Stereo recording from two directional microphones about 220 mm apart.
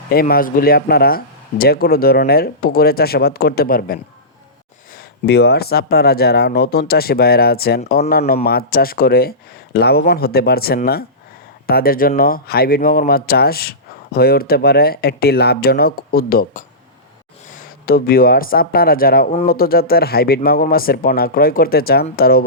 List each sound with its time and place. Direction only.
0.1 s speech: 45° left (ahead or behind)
5.2 s speech: 50° left (ahead or behind)